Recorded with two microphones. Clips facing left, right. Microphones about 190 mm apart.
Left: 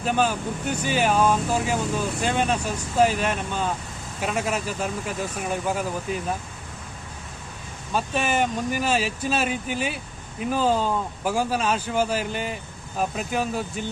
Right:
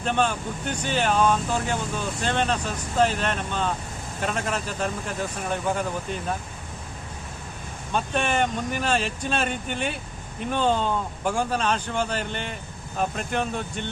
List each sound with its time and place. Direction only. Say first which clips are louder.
0.0 s speech: left 1 dB; 5° left (ahead or behind)
7.9 s speech: left 1 dB; 5° left (ahead or behind)